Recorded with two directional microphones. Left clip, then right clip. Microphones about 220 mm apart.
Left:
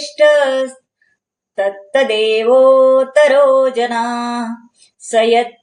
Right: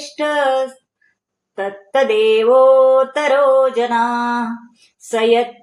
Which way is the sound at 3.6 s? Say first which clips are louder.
Even; 25° right (ahead or behind).